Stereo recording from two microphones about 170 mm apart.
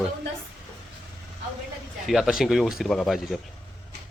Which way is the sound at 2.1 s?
Centre (ahead or behind).